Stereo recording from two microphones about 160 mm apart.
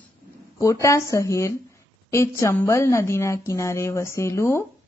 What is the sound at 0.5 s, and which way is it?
Speech, 20° left (ahead or behind).